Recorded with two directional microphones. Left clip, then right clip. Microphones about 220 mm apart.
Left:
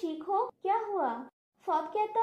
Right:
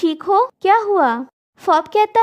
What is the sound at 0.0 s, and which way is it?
Speech, 50° right (ahead or behind).